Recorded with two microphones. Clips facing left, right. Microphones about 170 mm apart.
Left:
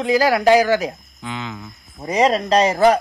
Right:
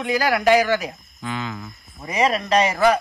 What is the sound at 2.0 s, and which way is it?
A man's voice, 30° left (ahead or behind).